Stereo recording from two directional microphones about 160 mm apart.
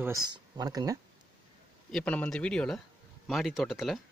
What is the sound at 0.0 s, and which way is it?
Speech, 20° right (ahead or behind).